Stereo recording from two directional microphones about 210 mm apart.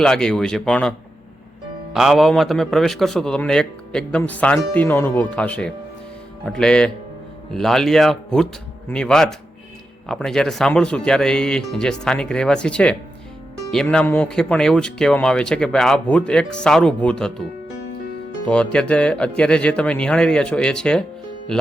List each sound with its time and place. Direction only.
0.0 s a man's voice: 5° left (ahead or behind)
18.4 s a man's voice: 5° left (ahead or behind)